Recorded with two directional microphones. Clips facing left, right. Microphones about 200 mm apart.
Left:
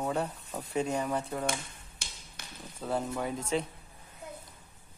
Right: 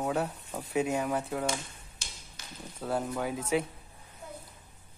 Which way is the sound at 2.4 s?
60° left (ahead or behind).